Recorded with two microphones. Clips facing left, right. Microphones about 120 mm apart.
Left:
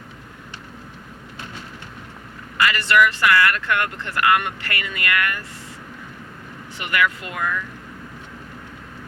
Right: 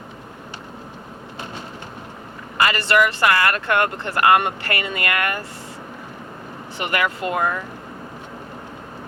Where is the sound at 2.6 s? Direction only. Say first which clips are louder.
Even; 30° right (ahead or behind).